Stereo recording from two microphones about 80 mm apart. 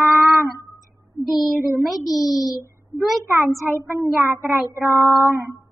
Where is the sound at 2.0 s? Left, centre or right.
Left.